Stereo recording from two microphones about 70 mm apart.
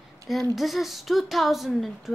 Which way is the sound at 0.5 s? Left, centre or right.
Centre.